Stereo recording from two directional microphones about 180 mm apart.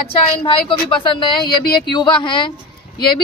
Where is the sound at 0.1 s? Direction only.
30° left (ahead or behind).